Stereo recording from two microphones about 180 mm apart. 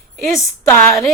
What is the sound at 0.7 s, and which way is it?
Speech, 15° left (ahead or behind).